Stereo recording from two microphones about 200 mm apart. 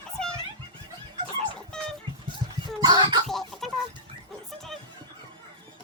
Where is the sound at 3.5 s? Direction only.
Centre (ahead or behind).